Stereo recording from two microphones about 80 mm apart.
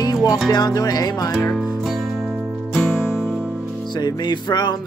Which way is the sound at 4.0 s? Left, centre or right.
Left.